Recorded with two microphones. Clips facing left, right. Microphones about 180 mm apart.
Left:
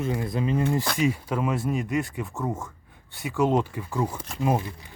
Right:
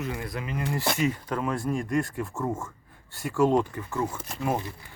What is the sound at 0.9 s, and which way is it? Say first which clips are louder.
Speech: left 2 dB; 10° left (ahead or behind).